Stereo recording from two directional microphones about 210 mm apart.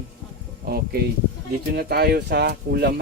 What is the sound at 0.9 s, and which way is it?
Speech, 45° right (ahead or behind).